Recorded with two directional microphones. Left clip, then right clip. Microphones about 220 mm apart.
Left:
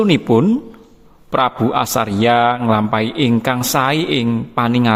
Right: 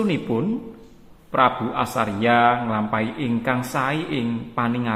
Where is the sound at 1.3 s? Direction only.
50° left (ahead or behind).